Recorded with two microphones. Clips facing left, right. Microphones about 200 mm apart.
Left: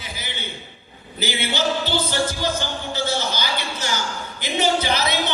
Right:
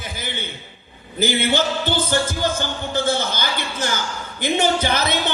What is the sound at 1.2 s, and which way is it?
Music, 50° right (ahead or behind).